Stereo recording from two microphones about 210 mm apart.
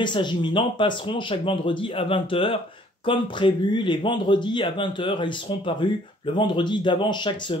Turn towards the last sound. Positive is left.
turn(degrees=20)  # may be behind; listen again after turning